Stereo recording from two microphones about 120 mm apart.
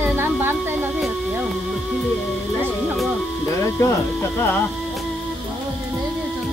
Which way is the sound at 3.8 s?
20° left (ahead or behind).